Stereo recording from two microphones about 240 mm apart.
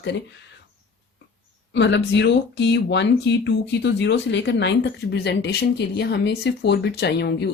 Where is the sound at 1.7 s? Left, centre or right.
Left.